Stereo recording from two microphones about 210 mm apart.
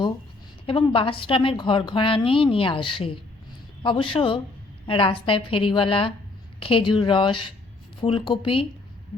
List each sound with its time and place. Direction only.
0.7 s a woman's voice: 25° left (ahead or behind)